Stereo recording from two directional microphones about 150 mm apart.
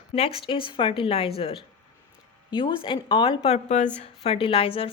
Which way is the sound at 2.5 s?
30° left (ahead or behind).